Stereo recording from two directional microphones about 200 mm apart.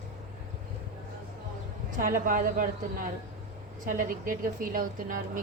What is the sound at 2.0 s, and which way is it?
A woman's voice, 45° right (ahead or behind).